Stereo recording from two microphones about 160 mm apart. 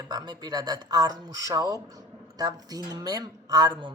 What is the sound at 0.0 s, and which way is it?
Speech, 25° right (ahead or behind).